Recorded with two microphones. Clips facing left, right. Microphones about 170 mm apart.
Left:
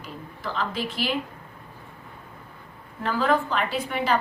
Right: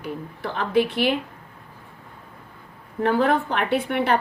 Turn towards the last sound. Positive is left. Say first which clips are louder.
# right 4 dB
turn(degrees=-65)  # may be behind; listen again after turning